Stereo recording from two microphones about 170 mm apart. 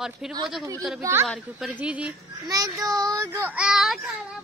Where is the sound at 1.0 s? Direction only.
15° right (ahead or behind).